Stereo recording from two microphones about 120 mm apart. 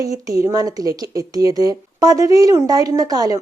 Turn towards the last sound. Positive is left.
turn(degrees=-30)  # may be behind; listen again after turning